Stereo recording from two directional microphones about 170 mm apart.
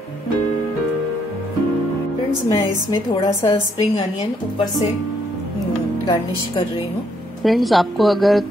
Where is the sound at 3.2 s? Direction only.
25° left (ahead or behind).